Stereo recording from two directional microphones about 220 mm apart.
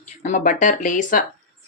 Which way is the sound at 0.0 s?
30° left (ahead or behind).